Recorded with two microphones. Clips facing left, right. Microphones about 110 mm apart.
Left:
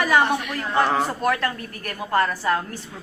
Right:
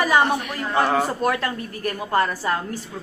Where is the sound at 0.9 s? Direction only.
30° right (ahead or behind).